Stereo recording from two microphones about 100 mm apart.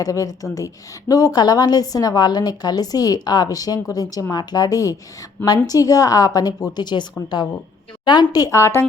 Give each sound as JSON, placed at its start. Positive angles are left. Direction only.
{"t": 0.0, "sound": "a woman's voice", "side_deg": 35}